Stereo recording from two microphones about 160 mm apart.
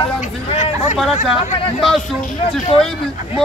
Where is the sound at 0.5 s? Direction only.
45° left (ahead or behind).